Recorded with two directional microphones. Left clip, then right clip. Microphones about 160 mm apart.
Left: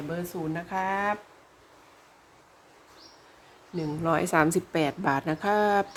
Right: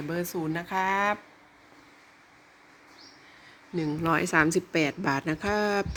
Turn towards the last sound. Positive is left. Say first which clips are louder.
# left 3 dB
turn(degrees=5)  # may be behind; listen again after turning